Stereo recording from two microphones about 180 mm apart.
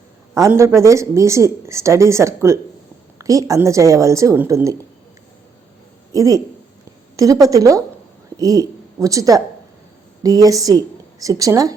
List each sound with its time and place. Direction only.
0.3 s speech: 15° right (ahead or behind)
6.1 s a woman's voice: 20° right (ahead or behind)